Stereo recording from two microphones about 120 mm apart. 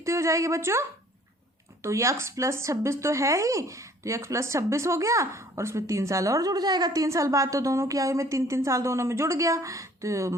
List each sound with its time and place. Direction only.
0.0 s speech: 25° right (ahead or behind)